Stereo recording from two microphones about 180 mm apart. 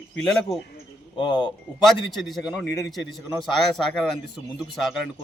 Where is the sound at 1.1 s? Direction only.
25° left (ahead or behind).